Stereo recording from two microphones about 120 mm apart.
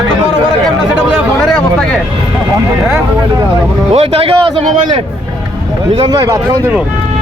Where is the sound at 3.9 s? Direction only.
55° right (ahead or behind).